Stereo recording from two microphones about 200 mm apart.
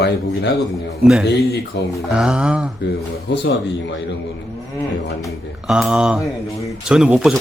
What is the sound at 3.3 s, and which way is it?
Speech, 60° left (ahead or behind).